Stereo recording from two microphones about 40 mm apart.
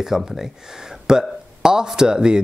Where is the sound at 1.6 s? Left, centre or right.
Centre.